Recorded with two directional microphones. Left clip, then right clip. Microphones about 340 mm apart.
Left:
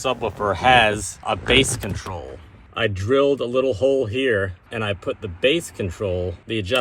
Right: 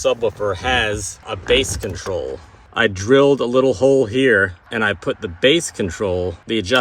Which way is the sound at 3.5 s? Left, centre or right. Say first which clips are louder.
Right 5 dB; right.